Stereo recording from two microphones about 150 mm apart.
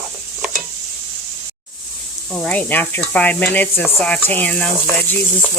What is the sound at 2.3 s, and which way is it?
Speech, 5° left (ahead or behind).